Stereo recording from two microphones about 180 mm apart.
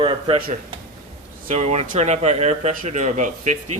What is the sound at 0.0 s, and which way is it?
Speech, 30° right (ahead or behind).